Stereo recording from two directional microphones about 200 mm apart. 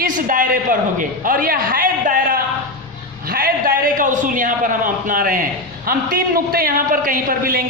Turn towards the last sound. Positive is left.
turn(degrees=-45)  # may be behind; listen again after turning